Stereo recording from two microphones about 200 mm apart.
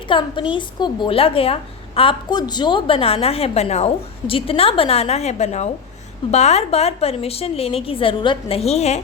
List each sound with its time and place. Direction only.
0.1 s a woman's voice: 25° left (ahead or behind)